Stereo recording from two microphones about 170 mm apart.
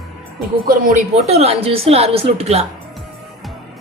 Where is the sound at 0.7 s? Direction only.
50° right (ahead or behind).